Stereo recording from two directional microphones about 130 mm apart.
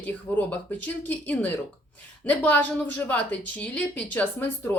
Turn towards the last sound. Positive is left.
turn(degrees=10)  # may be behind; listen again after turning